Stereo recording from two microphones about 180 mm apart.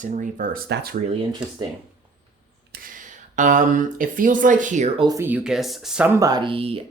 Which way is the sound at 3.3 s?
45° right (ahead or behind).